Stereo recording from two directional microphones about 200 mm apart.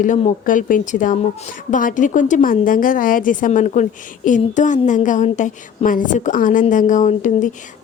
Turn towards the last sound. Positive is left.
turn(degrees=40)  # may be behind; listen again after turning